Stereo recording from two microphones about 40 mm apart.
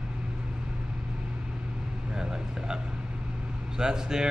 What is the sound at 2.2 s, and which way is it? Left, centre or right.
Speech, centre.